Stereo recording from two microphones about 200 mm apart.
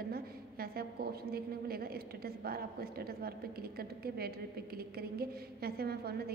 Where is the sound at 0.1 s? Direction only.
50° right (ahead or behind).